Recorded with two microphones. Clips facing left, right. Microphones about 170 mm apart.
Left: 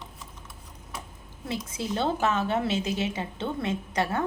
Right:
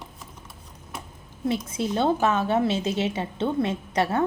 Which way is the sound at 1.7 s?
20° right (ahead or behind).